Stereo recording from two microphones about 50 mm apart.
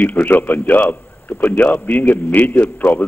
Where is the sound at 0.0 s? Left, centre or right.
Left.